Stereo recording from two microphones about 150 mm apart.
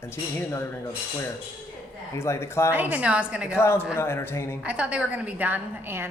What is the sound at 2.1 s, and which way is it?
Speech, 15° left (ahead or behind).